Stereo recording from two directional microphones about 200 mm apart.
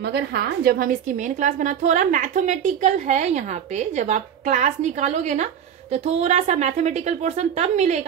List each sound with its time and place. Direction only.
0.1 s a woman's voice: 55° right (ahead or behind); by 8.0 s 35° right (ahead or behind)